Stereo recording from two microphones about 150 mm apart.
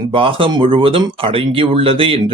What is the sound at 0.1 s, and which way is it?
Speech, 35° right (ahead or behind).